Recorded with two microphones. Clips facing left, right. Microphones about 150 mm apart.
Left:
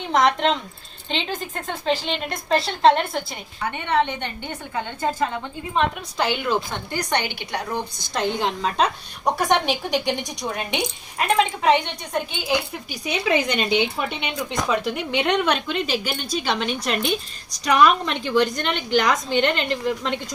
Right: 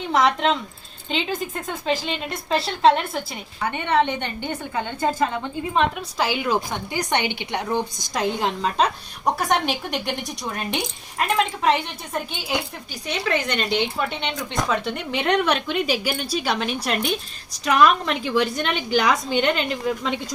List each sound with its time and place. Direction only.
0.1 s a woman's voice: 5° right (ahead or behind)
5.7 s a woman's voice: 5° right (ahead or behind)
6.7 s a woman's voice: 15° right (ahead or behind)
8.1 s a woman's voice: centre (ahead or behind)
12.9 s speech: 15° left (ahead or behind)
14.5 s a woman's voice: centre (ahead or behind)